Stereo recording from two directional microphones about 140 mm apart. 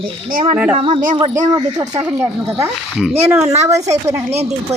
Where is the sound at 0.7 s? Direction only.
40° right (ahead or behind).